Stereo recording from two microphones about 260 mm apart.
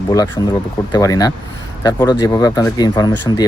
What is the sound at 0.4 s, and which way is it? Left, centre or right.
Speech, centre.